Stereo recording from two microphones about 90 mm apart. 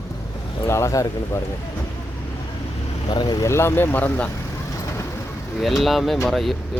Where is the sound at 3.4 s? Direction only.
30° left (ahead or behind).